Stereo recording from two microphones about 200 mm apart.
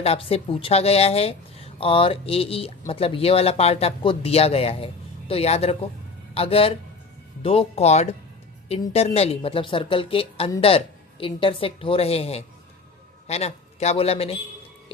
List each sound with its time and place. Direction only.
0.0 s speech: 30° left (ahead or behind)